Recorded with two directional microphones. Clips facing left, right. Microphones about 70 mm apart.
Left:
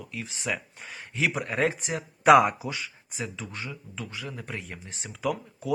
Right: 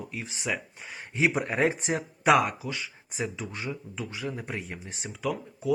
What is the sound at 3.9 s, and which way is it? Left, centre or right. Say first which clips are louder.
Speech: right 3 dB; right.